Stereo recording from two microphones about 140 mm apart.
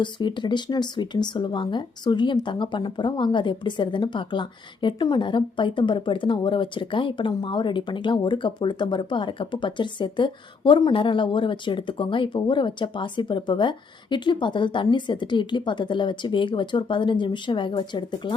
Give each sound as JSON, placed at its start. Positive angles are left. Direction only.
{"t": 0.0, "sound": "speech", "side_deg": 35}